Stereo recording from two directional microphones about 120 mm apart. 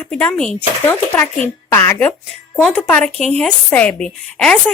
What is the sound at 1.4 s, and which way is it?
A woman's voice, 15° left (ahead or behind).